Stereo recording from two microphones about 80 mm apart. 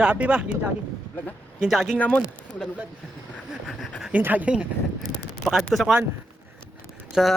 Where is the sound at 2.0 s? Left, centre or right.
Centre.